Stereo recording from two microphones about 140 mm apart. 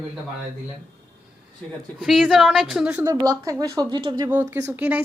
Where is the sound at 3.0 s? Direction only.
25° right (ahead or behind).